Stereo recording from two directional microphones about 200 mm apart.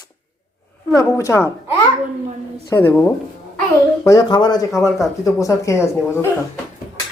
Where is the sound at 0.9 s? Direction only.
15° left (ahead or behind).